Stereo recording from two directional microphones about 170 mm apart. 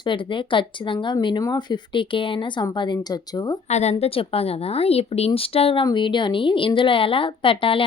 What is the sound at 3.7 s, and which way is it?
A woman's voice, 40° left (ahead or behind).